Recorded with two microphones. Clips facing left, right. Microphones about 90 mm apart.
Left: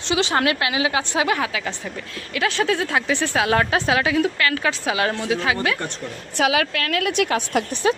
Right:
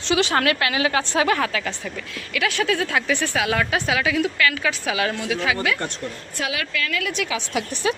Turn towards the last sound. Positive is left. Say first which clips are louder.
# left 3 dB
turn(degrees=40)  # may be behind; listen again after turning